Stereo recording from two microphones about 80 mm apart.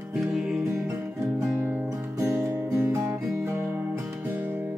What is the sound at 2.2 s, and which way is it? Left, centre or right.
Music, centre.